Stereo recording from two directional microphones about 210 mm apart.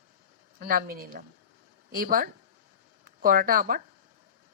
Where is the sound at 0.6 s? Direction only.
45° right (ahead or behind).